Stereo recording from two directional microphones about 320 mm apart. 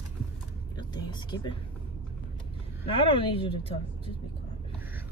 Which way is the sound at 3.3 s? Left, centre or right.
Centre.